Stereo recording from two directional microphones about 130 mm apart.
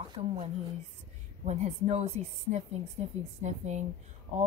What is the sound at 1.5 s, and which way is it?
A woman's voice, 60° right (ahead or behind).